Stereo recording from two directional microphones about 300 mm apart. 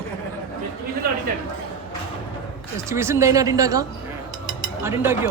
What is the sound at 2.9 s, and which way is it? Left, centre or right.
Speech, centre.